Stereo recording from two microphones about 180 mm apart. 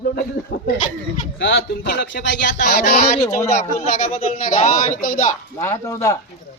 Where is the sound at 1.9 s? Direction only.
65° left (ahead or behind).